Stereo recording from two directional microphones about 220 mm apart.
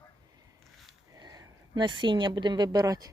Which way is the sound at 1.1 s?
20° right (ahead or behind).